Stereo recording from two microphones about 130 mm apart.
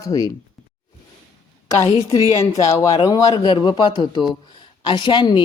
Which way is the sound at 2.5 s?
25° left (ahead or behind).